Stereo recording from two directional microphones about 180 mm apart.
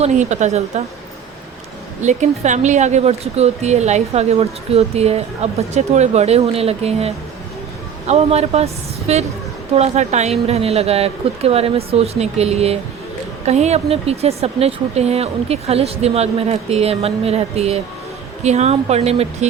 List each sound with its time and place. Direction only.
0.0 s speech: 40° right (ahead or behind)
2.0 s speech: 40° right (ahead or behind)